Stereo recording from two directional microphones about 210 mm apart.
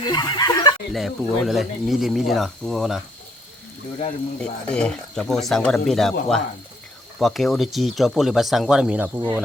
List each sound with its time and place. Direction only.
0.1 s speech: 20° left (ahead or behind)
0.9 s speech: centre (ahead or behind)
4.4 s speech: 5° left (ahead or behind)